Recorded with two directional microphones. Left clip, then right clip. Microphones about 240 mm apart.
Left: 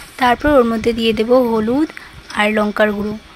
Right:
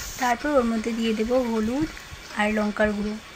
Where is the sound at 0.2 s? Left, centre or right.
Left.